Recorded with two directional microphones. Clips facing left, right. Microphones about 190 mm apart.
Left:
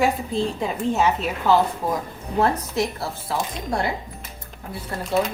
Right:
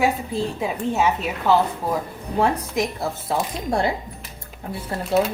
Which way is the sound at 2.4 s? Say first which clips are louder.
Right 1 dB; 15° right (ahead or behind).